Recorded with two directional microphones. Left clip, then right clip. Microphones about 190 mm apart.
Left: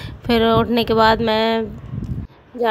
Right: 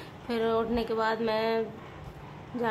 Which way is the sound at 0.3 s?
45° left (ahead or behind).